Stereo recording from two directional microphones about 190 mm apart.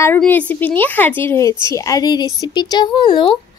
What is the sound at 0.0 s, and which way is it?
A woman's voice, 10° left (ahead or behind).